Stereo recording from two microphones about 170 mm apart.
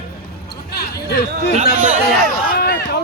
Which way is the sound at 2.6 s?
70° left (ahead or behind).